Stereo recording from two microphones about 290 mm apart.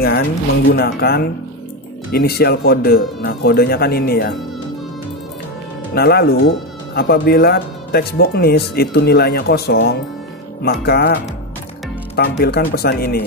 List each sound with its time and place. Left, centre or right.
0.7 s speech: left
5.9 s speech: left
12.2 s speech: left